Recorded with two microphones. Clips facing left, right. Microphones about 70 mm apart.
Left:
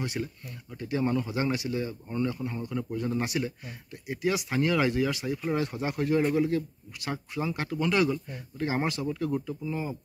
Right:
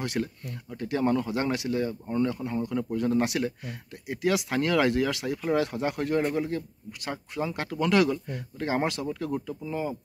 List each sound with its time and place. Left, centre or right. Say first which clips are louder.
0.0 s speech: right 3 dB; right
0.7 s speech: right 2 dB; right
7.8 s speech: right 3 dB; right